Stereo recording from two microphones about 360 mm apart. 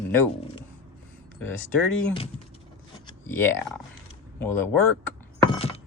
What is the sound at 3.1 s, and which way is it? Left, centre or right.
Speech, centre.